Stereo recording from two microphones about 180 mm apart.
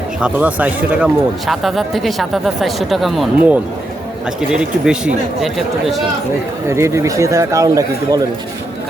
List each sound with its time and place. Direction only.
0.2 s speech: 5° right (ahead or behind)
6.7 s speech: 15° right (ahead or behind)